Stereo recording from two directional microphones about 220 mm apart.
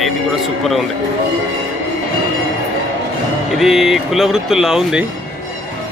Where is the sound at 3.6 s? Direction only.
Centre (ahead or behind).